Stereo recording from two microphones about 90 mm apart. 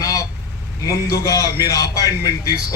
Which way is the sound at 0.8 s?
40° left (ahead or behind).